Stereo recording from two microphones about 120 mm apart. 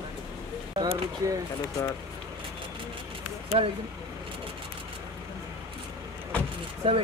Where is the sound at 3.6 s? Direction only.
55° right (ahead or behind).